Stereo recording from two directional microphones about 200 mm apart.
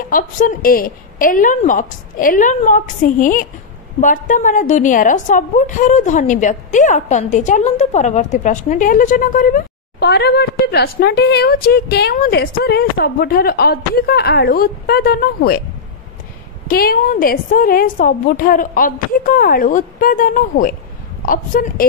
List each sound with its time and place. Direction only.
0.1 s a woman's voice: 45° left (ahead or behind)
16.6 s a woman's voice: 45° left (ahead or behind)